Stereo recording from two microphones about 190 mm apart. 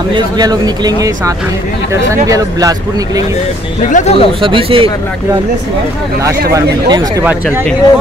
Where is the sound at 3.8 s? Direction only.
40° left (ahead or behind).